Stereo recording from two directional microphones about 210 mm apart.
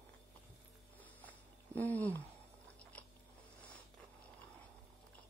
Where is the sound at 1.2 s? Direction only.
10° left (ahead or behind).